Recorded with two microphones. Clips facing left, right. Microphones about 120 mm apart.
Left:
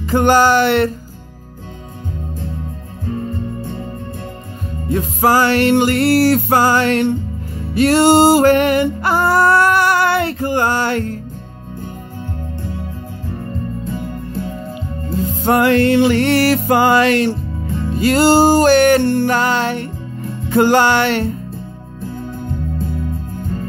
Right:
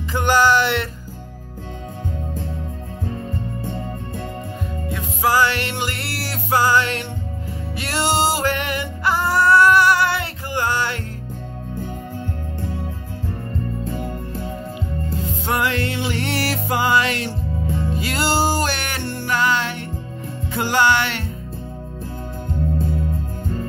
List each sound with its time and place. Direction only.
0.1 s music: 45° left (ahead or behind)
4.9 s music: 45° left (ahead or behind)
15.4 s music: 50° left (ahead or behind)
17.9 s music: 45° left (ahead or behind)